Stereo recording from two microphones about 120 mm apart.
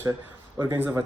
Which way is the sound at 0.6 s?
20° right (ahead or behind).